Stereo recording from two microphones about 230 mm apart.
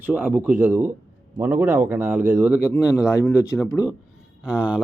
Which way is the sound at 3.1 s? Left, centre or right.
Centre.